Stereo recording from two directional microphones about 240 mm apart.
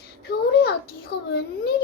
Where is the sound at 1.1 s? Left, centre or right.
Left.